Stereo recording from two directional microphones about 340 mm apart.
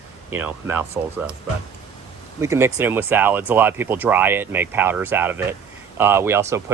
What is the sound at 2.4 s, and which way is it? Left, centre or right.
Speech, centre.